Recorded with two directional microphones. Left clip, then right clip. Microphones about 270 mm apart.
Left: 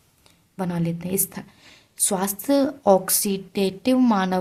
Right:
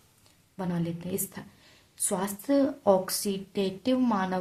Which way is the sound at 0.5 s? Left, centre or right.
Left.